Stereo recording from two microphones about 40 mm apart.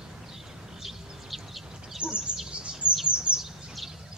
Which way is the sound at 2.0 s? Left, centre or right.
Right.